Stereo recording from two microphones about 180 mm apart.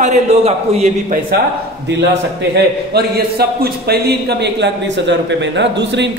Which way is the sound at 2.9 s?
60° right (ahead or behind).